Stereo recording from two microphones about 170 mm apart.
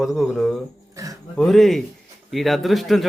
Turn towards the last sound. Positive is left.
turn(degrees=0)  # may be behind; listen again after turning